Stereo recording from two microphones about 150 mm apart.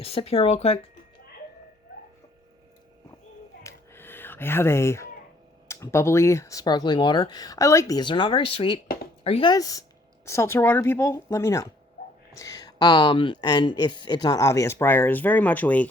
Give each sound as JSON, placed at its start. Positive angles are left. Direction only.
{"t": 0.0, "sound": "speech", "side_deg": 40}
{"t": 3.6, "sound": "a sound", "side_deg": 15}
{"t": 5.6, "sound": "speech", "side_deg": 20}
{"t": 9.5, "sound": "a woman's voice", "side_deg": 25}